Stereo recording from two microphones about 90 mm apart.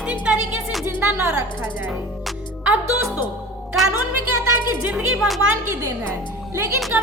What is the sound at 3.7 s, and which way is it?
Speech, centre (ahead or behind).